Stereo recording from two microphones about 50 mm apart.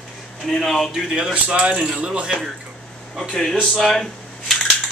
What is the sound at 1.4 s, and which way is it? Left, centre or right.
Speech, right.